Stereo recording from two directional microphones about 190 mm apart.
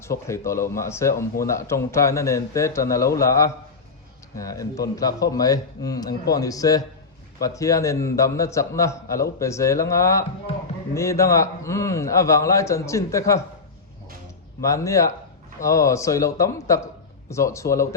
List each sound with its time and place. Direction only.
0.0 s a man's voice: 15° left (ahead or behind)
14.6 s speech: 15° left (ahead or behind)